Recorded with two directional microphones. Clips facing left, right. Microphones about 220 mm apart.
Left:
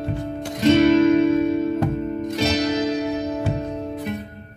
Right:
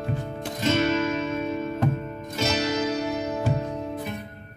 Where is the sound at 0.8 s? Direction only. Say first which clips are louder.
Left 10 dB; 35° left (ahead or behind).